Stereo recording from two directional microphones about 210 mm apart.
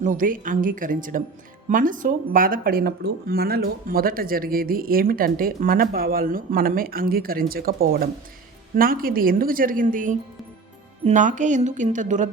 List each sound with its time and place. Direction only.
0.0 s a woman's voice: 40° right (ahead or behind)